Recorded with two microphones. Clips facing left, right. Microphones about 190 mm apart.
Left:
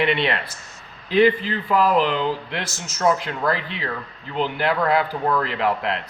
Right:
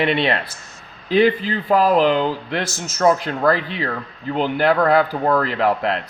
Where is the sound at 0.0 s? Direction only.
35° right (ahead or behind).